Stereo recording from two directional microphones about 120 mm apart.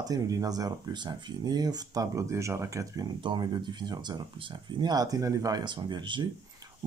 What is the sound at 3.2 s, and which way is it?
Speech, 40° right (ahead or behind).